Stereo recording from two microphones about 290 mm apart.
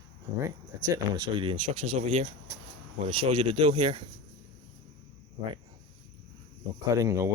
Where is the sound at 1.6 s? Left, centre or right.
Right.